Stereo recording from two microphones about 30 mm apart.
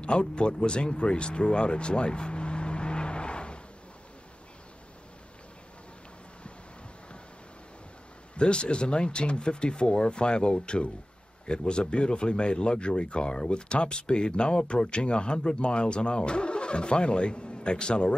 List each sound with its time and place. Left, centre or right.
0.0 s speech: left
8.4 s speech: left